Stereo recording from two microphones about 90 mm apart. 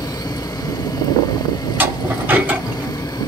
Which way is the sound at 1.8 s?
20° right (ahead or behind).